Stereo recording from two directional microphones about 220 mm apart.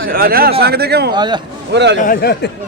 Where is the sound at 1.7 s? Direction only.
50° right (ahead or behind).